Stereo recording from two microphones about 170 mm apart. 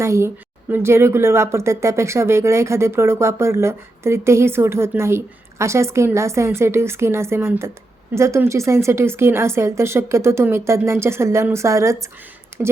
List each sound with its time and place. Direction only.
0.0 s speech: 15° right (ahead or behind)